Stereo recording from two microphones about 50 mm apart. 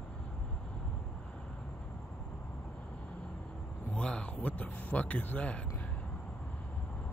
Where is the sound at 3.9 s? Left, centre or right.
Left.